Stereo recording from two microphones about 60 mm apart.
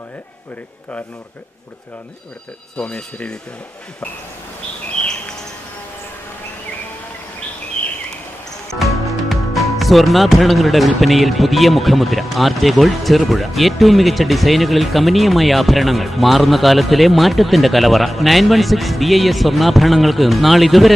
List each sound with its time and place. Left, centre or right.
2.7 s speech: centre
9.3 s speech: centre